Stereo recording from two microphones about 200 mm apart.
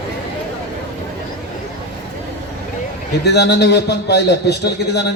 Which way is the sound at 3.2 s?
55° left (ahead or behind).